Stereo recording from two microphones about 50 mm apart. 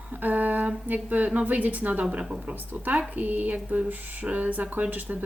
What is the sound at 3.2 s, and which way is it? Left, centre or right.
Speech, right.